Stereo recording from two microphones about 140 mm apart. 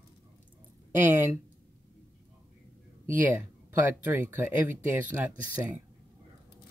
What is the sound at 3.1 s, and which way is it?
Speech, 15° right (ahead or behind).